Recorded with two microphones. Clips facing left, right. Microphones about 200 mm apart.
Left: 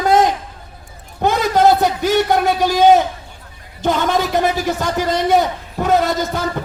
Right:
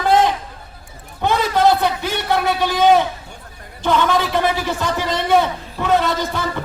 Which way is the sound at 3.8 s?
45° left (ahead or behind).